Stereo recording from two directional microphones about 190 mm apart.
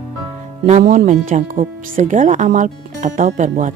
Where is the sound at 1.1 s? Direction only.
40° right (ahead or behind).